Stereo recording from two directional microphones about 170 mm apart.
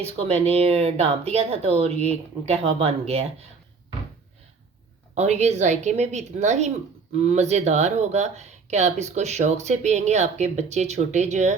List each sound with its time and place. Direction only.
0.2 s speech: 35° right (ahead or behind)
5.1 s speech: 40° right (ahead or behind)